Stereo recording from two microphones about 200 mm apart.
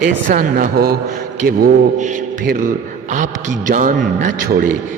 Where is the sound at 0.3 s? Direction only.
45° right (ahead or behind).